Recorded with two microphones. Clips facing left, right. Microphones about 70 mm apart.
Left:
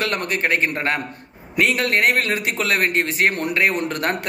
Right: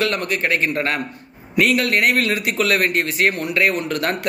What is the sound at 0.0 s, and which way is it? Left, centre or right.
A man's voice, left.